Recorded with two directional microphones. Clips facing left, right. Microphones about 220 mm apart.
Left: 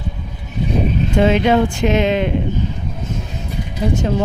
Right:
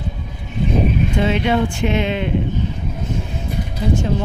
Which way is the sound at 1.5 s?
40° left (ahead or behind).